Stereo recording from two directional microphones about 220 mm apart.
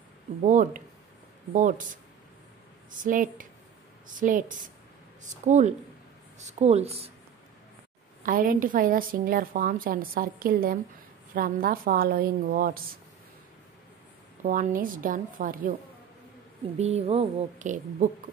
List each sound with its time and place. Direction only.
0.4 s a woman's voice: 35° right (ahead or behind)
2.9 s a woman's voice: 35° right (ahead or behind)
8.2 s a woman's voice: 40° right (ahead or behind)
14.4 s a woman's voice: 40° right (ahead or behind)
16.7 s speech: 30° right (ahead or behind)